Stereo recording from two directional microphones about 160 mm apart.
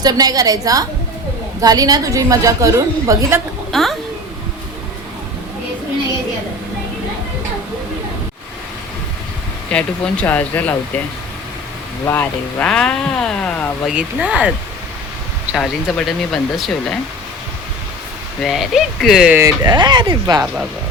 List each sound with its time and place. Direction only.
0.0 s a woman's voice: 25° right (ahead or behind)
3.7 s music: centre (ahead or behind)
9.6 s speech: 5° left (ahead or behind)
12.0 s speech: 10° left (ahead or behind)
13.9 s speech: 5° right (ahead or behind)
15.5 s speech: centre (ahead or behind)
18.4 s speech: centre (ahead or behind)
19.4 s a woman's voice: 25° right (ahead or behind)